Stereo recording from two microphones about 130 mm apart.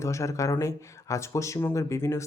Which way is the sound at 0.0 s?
25° left (ahead or behind).